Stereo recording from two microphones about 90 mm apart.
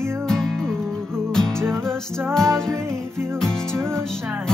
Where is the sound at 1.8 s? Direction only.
5° left (ahead or behind).